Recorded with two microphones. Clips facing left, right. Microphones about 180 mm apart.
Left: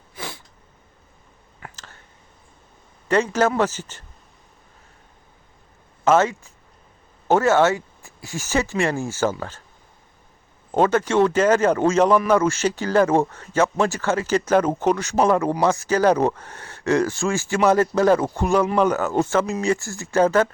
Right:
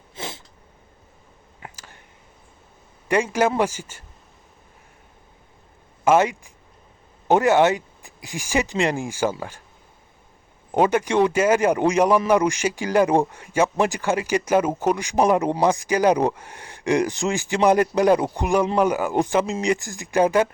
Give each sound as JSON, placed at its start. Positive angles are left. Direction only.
{"t": 0.2, "sound": "cat", "side_deg": -20}
{"t": 1.7, "sound": "a sound", "side_deg": -10}
{"t": 3.1, "sound": "speech", "side_deg": -10}
{"t": 6.1, "sound": "speech", "side_deg": -15}
{"t": 10.7, "sound": "speech", "side_deg": -10}